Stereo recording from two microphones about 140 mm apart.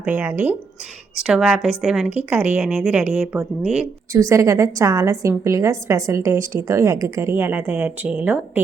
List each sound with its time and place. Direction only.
0.0 s a woman's voice: 10° right (ahead or behind)
4.1 s a woman's voice: 20° right (ahead or behind)